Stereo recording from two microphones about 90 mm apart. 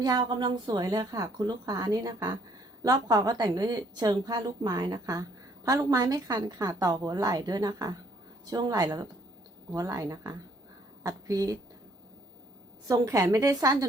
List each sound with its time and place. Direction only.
0.0 s speech: 55° right (ahead or behind)
0.7 s a woman's voice: 45° right (ahead or behind)
12.9 s a woman's voice: 40° right (ahead or behind)